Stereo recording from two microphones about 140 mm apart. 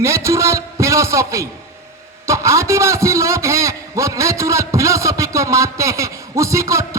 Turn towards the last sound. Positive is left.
turn(degrees=-20)  # may be behind; listen again after turning